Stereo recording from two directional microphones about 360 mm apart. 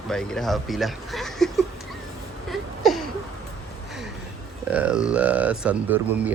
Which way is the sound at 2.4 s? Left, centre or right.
Centre.